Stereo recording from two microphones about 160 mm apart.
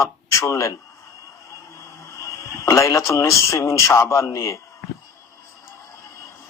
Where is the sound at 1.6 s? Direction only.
20° left (ahead or behind).